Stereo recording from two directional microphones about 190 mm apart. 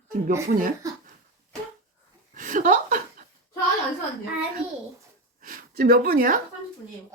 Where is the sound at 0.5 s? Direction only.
50° right (ahead or behind).